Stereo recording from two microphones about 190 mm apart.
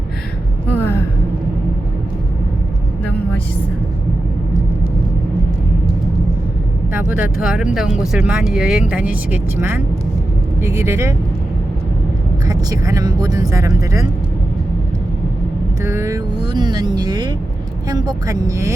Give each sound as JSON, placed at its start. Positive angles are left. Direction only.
{"t": 7.2, "sound": "speech", "side_deg": -5}
{"t": 12.5, "sound": "speech", "side_deg": -20}
{"t": 15.8, "sound": "speech", "side_deg": -15}